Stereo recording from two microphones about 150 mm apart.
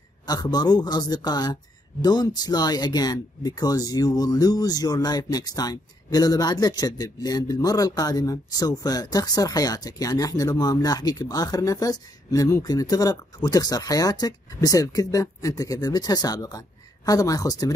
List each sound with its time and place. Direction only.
0.3 s speech: 25° left (ahead or behind)